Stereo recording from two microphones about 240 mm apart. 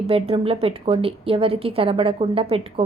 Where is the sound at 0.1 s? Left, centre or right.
Right.